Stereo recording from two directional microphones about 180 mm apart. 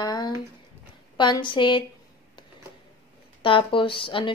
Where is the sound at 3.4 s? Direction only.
30° left (ahead or behind).